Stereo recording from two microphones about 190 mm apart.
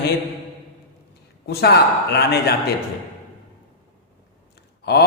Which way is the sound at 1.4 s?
55° left (ahead or behind).